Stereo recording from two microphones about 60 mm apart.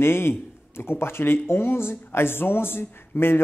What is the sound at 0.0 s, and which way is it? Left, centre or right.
Speech, left.